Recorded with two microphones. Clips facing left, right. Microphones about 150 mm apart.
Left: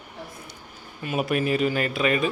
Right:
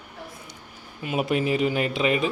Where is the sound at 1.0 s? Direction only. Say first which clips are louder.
Even; 20° right (ahead or behind).